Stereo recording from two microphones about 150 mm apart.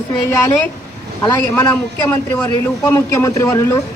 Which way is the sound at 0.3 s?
20° left (ahead or behind).